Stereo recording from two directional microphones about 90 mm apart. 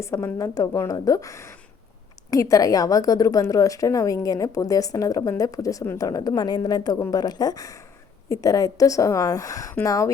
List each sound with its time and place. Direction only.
0.0 s a woman's voice: 30° left (ahead or behind)